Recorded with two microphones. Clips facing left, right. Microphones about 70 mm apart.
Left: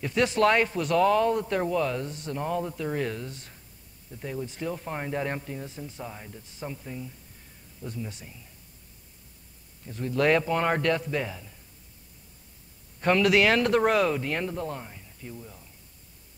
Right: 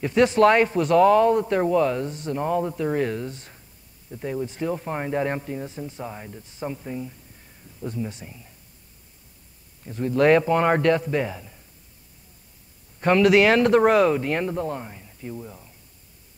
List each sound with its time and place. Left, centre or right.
0.0 s speech: right
9.8 s speech: right
13.0 s speech: right